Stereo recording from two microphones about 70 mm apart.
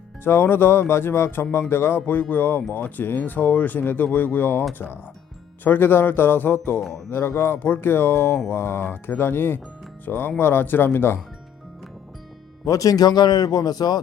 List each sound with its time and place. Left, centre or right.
0.3 s speech: left
5.6 s speech: left
12.6 s speech: left